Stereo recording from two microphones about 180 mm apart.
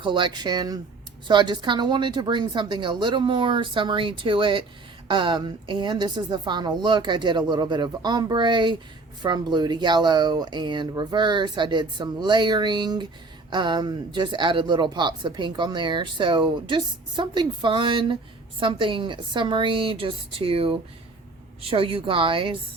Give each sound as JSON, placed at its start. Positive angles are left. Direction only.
{"t": 0.0, "sound": "a woman's voice", "side_deg": -25}